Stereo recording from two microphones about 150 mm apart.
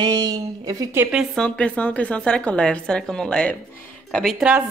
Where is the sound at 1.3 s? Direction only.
5° left (ahead or behind).